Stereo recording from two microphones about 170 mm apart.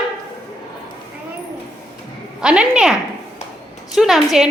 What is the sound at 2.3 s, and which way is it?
Speech, 5° right (ahead or behind).